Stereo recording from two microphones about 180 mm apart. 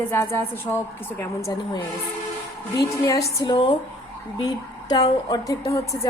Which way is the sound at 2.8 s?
20° left (ahead or behind).